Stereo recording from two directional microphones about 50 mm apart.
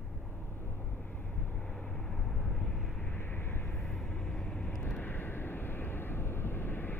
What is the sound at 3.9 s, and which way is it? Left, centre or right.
Vehicle, centre.